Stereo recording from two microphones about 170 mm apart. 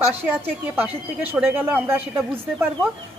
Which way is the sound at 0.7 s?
10° right (ahead or behind).